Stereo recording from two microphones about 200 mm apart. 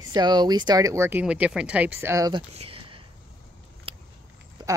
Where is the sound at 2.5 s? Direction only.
30° right (ahead or behind).